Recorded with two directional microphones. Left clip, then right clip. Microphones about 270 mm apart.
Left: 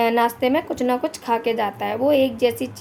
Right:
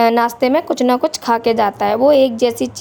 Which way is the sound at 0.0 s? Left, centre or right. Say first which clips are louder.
Right 5 dB; right.